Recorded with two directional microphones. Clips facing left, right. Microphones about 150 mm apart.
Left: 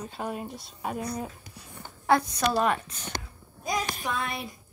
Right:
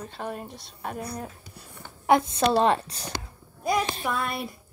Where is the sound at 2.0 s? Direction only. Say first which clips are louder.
Right 3 dB; 20° right (ahead or behind).